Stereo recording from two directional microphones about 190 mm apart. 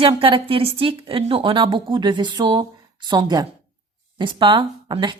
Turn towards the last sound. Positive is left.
turn(degrees=-25)  # may be behind; listen again after turning